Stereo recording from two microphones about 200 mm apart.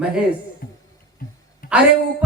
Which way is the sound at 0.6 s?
45° left (ahead or behind).